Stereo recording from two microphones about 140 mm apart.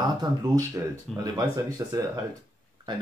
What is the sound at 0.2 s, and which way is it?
A man's voice, 30° right (ahead or behind).